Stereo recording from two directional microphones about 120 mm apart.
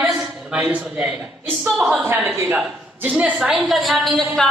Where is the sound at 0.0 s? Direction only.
5° right (ahead or behind).